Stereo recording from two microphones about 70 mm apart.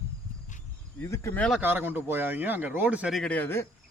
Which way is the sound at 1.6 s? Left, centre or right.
Right.